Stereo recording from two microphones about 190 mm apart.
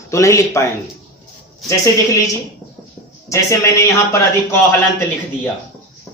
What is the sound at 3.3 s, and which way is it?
Speech, 15° left (ahead or behind).